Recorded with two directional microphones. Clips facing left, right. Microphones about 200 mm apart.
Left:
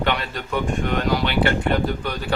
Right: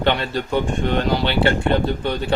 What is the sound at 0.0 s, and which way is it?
Speech, 30° right (ahead or behind).